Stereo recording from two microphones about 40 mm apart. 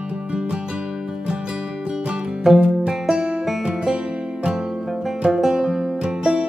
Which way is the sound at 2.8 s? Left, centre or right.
Centre.